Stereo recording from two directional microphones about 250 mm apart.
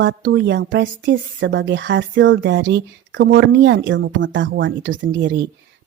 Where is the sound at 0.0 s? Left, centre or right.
Right.